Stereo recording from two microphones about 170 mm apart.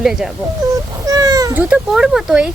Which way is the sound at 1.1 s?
20° right (ahead or behind).